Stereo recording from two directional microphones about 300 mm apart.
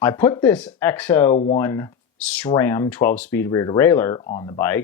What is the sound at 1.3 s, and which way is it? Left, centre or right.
Speech, centre.